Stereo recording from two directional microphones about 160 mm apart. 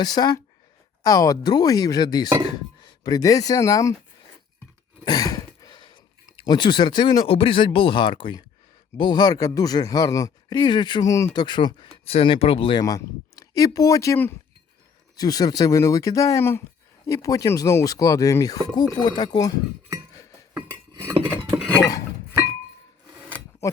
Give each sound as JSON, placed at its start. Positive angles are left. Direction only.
{"t": 0.0, "sound": "speech", "side_deg": 25}
{"t": 5.0, "sound": "speech", "side_deg": 25}
{"t": 12.8, "sound": "speech", "side_deg": 20}
{"t": 20.9, "sound": "cutlery", "side_deg": -25}
{"t": 23.3, "sound": "a sound", "side_deg": 15}